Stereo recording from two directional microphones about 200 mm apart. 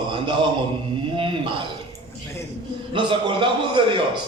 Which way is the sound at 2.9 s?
25° right (ahead or behind).